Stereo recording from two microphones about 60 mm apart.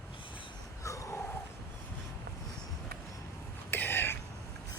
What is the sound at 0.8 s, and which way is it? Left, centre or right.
Wheeze, left.